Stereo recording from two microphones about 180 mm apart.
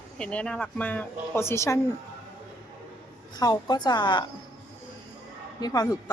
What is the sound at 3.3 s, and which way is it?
Speech, 20° left (ahead or behind).